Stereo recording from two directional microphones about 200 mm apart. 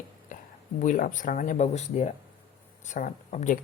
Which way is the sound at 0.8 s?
40° left (ahead or behind).